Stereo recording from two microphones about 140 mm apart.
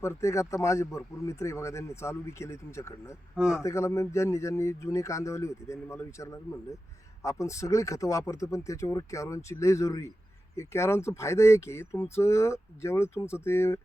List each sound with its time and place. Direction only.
0.0 s a man's voice: 20° left (ahead or behind)
3.3 s a man's voice: 5° right (ahead or behind)
3.6 s a man's voice: 20° left (ahead or behind)